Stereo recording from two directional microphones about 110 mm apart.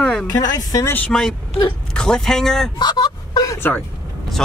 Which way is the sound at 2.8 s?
40° left (ahead or behind).